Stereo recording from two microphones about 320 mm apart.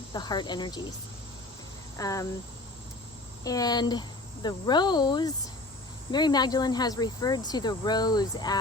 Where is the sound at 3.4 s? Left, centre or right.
Centre.